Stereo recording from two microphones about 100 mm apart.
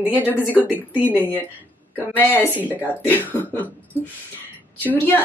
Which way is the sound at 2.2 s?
20° left (ahead or behind).